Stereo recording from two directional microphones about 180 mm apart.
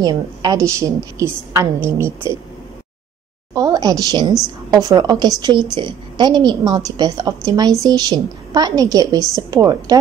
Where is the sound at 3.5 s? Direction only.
20° right (ahead or behind).